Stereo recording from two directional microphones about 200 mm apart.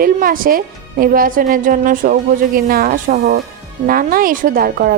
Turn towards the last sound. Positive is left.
turn(degrees=-45)  # may be behind; listen again after turning